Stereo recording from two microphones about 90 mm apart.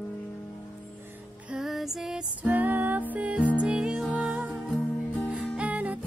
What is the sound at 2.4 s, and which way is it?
Music, 20° right (ahead or behind).